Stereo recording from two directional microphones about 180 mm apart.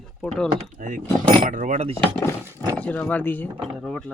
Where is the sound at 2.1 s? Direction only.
15° left (ahead or behind).